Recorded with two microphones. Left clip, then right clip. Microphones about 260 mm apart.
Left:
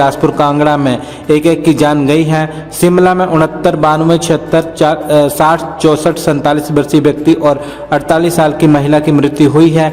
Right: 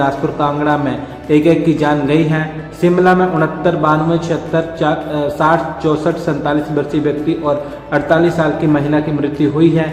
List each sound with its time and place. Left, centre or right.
0.0 s a man's voice: left